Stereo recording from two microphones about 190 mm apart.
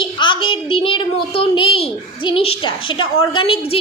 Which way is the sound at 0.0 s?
25° left (ahead or behind).